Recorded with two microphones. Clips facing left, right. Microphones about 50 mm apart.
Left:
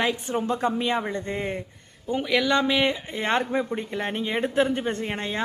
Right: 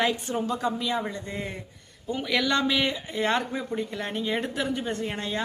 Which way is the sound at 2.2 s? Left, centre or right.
Centre.